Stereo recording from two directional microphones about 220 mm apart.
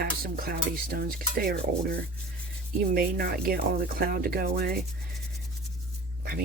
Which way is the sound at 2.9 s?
40° right (ahead or behind).